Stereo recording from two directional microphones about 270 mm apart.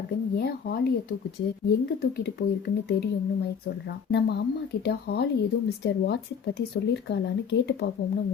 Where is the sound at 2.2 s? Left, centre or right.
Left.